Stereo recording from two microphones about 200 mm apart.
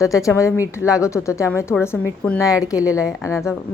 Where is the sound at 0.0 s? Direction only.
15° left (ahead or behind).